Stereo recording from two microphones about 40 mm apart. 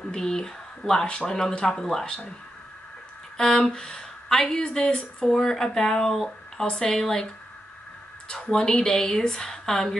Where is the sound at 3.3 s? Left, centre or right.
Centre.